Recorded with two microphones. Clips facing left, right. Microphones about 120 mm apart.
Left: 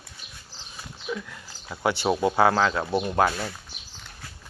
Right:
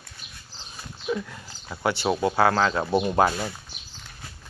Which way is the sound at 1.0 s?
15° right (ahead or behind).